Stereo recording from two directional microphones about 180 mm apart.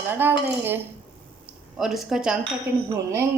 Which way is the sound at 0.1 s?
10° right (ahead or behind).